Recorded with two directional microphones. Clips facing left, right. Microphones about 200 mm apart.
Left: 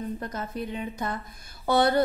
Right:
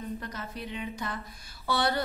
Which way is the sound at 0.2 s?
45° left (ahead or behind).